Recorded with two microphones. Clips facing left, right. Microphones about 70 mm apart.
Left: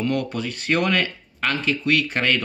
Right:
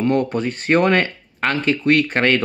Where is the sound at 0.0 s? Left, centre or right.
Right.